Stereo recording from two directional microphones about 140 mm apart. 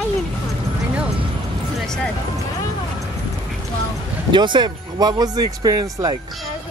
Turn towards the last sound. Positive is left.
turn(degrees=-30)  # may be behind; listen again after turning